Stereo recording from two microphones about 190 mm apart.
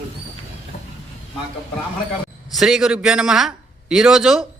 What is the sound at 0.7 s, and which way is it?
Vehicle, 35° left (ahead or behind).